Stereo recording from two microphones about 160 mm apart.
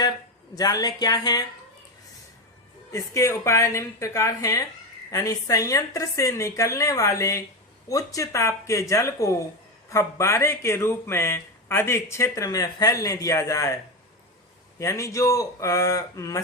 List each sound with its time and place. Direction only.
0.0 s speech: 25° left (ahead or behind)
2.9 s a woman's voice: 20° left (ahead or behind)
14.8 s a woman's voice: 20° left (ahead or behind)